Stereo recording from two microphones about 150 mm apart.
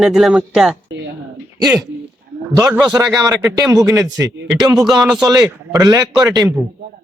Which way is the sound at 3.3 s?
20° right (ahead or behind).